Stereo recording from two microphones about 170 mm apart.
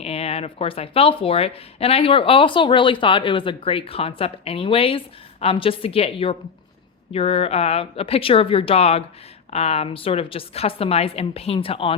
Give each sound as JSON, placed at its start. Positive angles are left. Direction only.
{"t": 0.0, "sound": "speech", "side_deg": 35}